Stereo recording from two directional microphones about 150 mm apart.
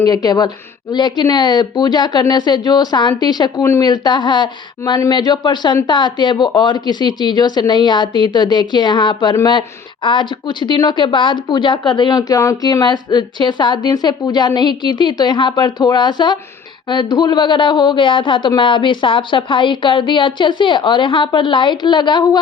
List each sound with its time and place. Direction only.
0.0 s a woman's voice: 25° left (ahead or behind)